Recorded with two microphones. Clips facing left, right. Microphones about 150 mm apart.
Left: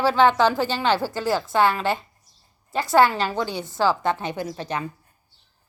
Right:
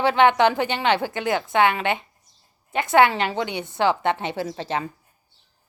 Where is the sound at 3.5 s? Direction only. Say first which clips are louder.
Even; 20° right (ahead or behind).